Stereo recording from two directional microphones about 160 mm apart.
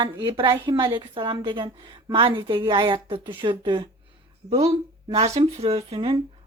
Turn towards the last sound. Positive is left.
turn(degrees=-35)  # may be behind; listen again after turning